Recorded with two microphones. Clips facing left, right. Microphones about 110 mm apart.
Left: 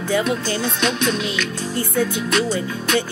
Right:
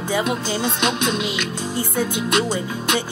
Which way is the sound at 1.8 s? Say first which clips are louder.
Left 2 dB; 15° right (ahead or behind).